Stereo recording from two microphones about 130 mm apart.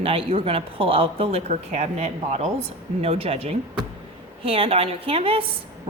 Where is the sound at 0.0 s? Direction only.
45° right (ahead or behind).